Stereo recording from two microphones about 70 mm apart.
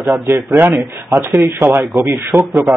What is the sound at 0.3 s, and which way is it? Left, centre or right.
Speech, right.